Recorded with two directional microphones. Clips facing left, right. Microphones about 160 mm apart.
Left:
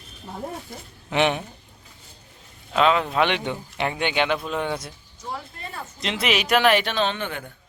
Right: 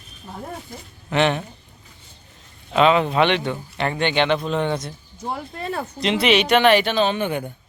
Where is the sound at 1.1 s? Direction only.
10° left (ahead or behind).